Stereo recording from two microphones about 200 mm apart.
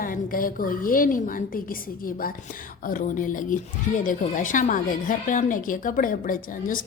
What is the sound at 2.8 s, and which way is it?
A woman's voice, 40° left (ahead or behind).